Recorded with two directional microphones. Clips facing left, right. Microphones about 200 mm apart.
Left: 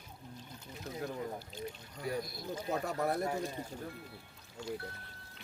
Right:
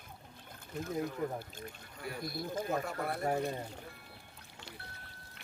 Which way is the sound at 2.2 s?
55° right (ahead or behind).